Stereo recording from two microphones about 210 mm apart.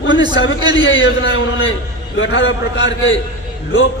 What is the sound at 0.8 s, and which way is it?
A man's voice, 65° left (ahead or behind).